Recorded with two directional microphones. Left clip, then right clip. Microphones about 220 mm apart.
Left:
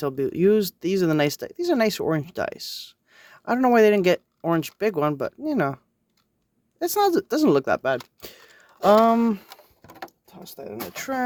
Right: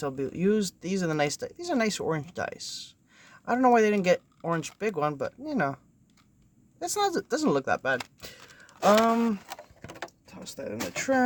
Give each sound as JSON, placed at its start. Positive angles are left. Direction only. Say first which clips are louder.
{"t": 0.0, "sound": "speech", "louder": "left 7 dB", "side_deg": 40}